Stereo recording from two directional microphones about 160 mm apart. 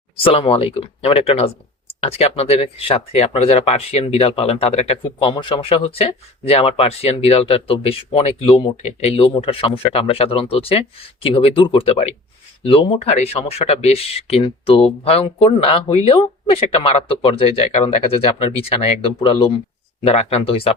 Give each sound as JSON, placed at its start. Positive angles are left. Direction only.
{"t": 0.2, "sound": "speech", "side_deg": 35}
{"t": 5.3, "sound": "speech", "side_deg": 30}